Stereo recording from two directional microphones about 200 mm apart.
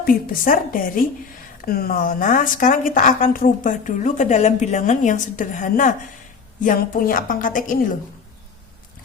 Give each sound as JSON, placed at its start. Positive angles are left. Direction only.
{"t": 0.0, "sound": "a woman's voice", "side_deg": 45}